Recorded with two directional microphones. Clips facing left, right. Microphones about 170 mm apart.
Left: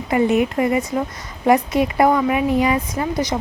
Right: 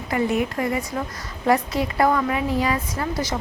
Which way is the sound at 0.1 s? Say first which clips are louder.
Left 5 dB; 20° left (ahead or behind).